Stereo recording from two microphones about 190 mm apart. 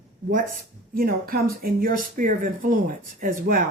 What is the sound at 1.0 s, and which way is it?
Speech, 50° right (ahead or behind).